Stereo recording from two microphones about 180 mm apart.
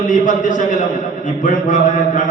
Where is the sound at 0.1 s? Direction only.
45° left (ahead or behind).